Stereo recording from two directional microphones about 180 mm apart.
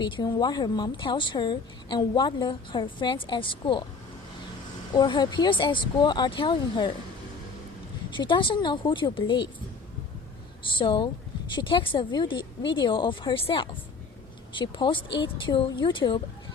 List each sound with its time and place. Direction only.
0.0 s a woman's voice: 25° left (ahead or behind)
4.9 s a woman's voice: 25° left (ahead or behind)
8.1 s a woman's voice: 25° left (ahead or behind)
10.6 s a woman's voice: 30° left (ahead or behind)